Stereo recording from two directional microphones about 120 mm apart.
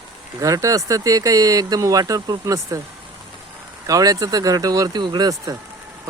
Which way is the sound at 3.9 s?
30° right (ahead or behind).